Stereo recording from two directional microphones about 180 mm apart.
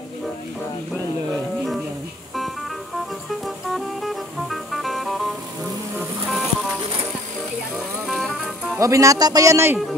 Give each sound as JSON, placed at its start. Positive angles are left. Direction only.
{"t": 3.3, "sound": "music", "side_deg": 0}
{"t": 8.1, "sound": "vehicle", "side_deg": 0}
{"t": 8.6, "sound": "speech", "side_deg": -15}